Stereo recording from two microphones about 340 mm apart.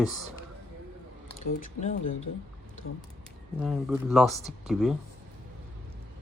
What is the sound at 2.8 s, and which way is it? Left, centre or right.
Speech, left.